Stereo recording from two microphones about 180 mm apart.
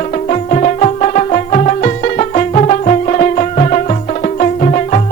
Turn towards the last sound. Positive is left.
turn(degrees=40)  # may be behind; listen again after turning